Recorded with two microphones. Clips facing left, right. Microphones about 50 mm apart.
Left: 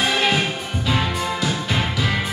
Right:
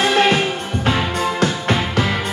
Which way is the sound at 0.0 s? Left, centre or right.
Right.